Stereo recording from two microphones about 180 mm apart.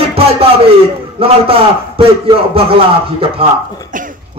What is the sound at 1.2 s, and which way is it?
Speech, 30° right (ahead or behind).